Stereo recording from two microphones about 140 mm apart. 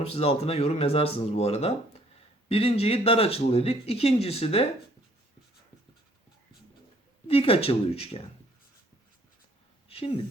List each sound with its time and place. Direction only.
0.0 s speech: 45° left (ahead or behind)
7.3 s speech: 40° left (ahead or behind)
9.9 s a sound: 45° left (ahead or behind)